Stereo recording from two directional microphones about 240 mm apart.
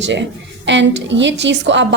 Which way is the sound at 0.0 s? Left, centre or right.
Right.